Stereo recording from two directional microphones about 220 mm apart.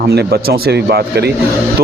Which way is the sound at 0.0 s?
45° right (ahead or behind).